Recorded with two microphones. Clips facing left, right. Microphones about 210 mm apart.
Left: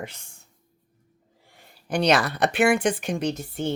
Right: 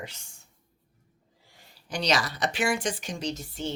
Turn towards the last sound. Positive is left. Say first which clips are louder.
# left 6 dB
turn(degrees=55)  # may be behind; listen again after turning